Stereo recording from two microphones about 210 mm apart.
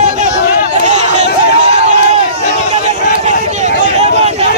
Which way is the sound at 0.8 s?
35° right (ahead or behind).